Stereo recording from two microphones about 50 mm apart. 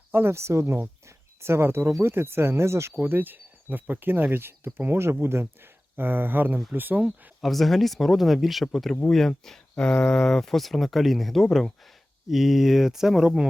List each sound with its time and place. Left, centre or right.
0.1 s speech: right
1.0 s a sound: right
1.9 s speech: right
3.0 s speech: right
4.9 s speech: right
7.4 s speech: centre